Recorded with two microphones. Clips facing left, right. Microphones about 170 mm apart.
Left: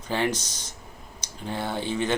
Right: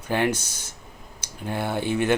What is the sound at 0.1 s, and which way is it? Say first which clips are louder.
Speech: right 3 dB; 10° right (ahead or behind).